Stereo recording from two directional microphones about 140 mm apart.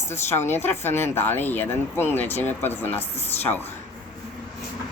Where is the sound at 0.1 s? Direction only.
15° left (ahead or behind).